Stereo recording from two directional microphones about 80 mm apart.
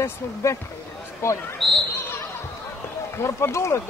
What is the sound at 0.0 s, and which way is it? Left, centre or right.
Speech, left.